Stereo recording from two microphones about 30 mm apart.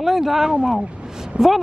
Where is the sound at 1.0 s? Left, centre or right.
Right.